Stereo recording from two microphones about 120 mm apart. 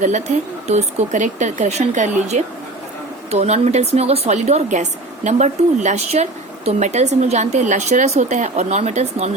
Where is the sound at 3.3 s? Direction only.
65° right (ahead or behind).